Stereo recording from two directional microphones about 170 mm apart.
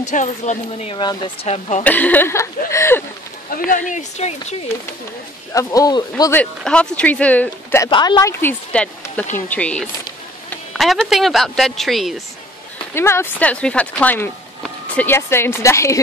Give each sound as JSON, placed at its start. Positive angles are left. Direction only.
{"t": 0.1, "sound": "speech", "side_deg": 45}
{"t": 0.9, "sound": "speech", "side_deg": 25}
{"t": 1.8, "sound": "speech", "side_deg": 10}
{"t": 3.4, "sound": "speech", "side_deg": 55}
{"t": 3.9, "sound": "speech", "side_deg": 40}
{"t": 5.5, "sound": "speech", "side_deg": 20}
{"t": 6.3, "sound": "speech", "side_deg": 5}
{"t": 7.9, "sound": "a woman's voice", "side_deg": 25}
{"t": 12.9, "sound": "speech", "side_deg": 15}